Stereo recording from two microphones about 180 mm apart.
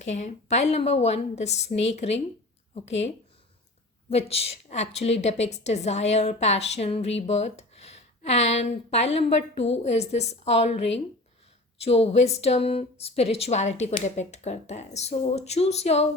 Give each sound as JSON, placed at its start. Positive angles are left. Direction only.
{"t": 0.0, "sound": "a woman's voice", "side_deg": 40}
{"t": 4.1, "sound": "a woman's voice", "side_deg": 35}
{"t": 11.8, "sound": "a woman's voice", "side_deg": 35}